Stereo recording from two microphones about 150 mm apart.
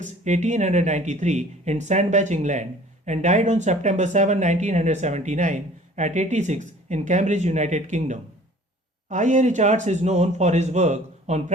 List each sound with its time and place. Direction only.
0.0 s speech: 55° right (ahead or behind)